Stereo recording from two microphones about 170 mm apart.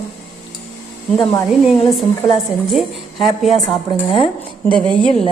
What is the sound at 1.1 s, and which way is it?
Speech, 25° left (ahead or behind).